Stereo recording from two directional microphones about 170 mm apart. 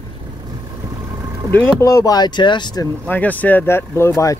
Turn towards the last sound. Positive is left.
turn(degrees=15)  # may be behind; listen again after turning